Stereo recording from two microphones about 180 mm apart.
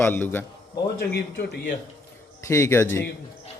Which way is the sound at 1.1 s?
65° left (ahead or behind).